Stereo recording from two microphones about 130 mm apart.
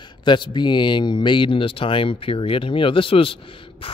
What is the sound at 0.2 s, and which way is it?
Speech, 35° left (ahead or behind).